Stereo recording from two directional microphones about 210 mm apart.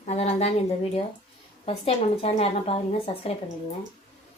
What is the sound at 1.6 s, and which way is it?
A woman's voice, 30° left (ahead or behind).